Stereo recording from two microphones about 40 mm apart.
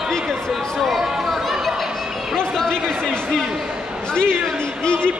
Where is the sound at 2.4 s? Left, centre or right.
Centre.